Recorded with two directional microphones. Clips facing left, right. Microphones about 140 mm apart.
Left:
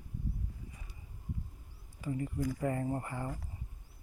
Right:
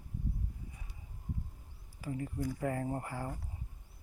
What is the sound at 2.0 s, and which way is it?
Speech, centre (ahead or behind).